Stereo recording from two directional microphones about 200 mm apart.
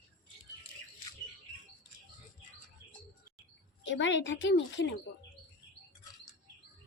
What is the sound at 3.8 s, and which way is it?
A woman's voice, 60° left (ahead or behind).